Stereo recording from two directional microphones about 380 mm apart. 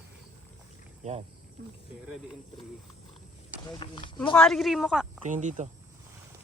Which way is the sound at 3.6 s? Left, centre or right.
Centre.